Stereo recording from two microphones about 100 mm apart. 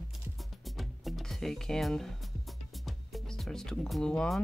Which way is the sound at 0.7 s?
Centre (ahead or behind).